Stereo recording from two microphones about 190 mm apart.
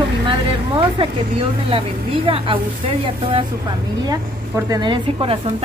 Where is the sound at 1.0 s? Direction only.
30° right (ahead or behind).